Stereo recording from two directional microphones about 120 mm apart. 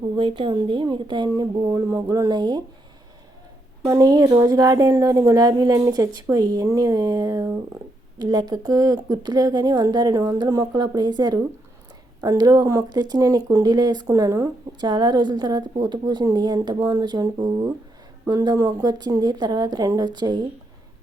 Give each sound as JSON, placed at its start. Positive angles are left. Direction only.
{"t": 0.2, "sound": "speech", "side_deg": -45}
{"t": 1.6, "sound": "speech", "side_deg": -25}
{"t": 3.8, "sound": "speech", "side_deg": -30}